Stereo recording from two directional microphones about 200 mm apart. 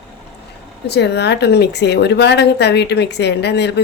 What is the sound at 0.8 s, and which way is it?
Speech, 55° left (ahead or behind).